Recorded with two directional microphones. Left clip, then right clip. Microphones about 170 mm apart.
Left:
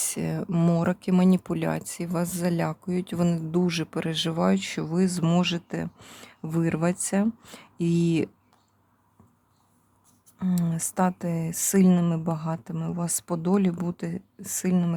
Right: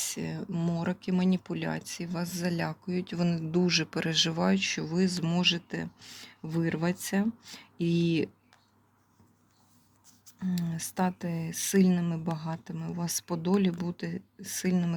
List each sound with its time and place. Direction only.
0.0 s speech: 30° left (ahead or behind)
0.5 s speech: 45° left (ahead or behind); by 8.3 s 25° left (ahead or behind)
10.3 s speech: 30° left (ahead or behind)